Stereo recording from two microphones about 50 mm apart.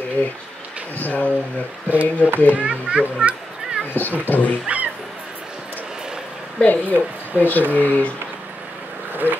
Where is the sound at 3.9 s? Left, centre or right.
Left.